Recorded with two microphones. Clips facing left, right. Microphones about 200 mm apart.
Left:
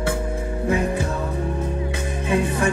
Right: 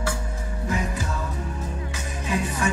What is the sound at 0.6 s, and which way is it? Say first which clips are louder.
Music: left 6 dB; 60° left (ahead or behind).